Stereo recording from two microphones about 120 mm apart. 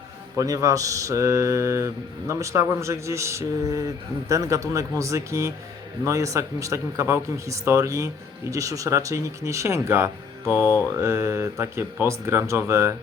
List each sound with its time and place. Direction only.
0.3 s speech: 30° right (ahead or behind)